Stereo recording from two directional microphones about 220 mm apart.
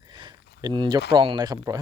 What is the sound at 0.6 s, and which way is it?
Speech, 20° right (ahead or behind).